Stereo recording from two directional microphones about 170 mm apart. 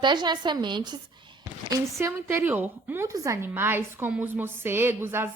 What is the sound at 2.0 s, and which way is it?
A woman's voice, 15° right (ahead or behind).